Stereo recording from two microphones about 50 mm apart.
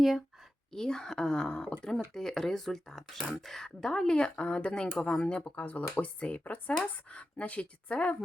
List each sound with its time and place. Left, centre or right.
0.7 s speech: centre